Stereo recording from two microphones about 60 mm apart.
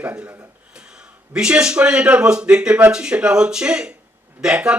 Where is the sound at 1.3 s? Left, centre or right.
Centre.